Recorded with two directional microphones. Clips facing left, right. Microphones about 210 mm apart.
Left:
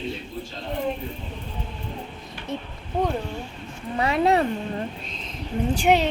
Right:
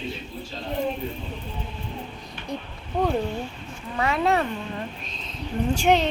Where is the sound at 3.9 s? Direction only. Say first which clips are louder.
Left 2 dB; 25° left (ahead or behind).